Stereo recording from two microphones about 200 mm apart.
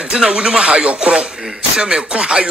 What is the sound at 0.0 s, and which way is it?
Speech, 5° right (ahead or behind).